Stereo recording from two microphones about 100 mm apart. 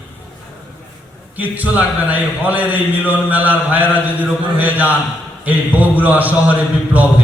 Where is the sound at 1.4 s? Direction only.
15° right (ahead or behind).